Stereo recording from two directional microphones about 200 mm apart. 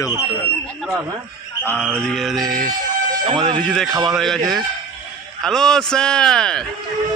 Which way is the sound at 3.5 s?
5° left (ahead or behind).